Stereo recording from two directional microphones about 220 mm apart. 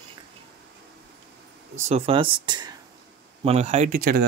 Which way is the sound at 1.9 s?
25° right (ahead or behind).